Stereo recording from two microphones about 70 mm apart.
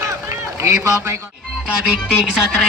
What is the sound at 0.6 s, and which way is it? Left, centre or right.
Speech, right.